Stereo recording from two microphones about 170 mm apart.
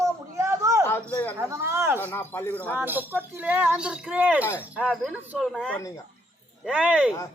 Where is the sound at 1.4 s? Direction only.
15° right (ahead or behind).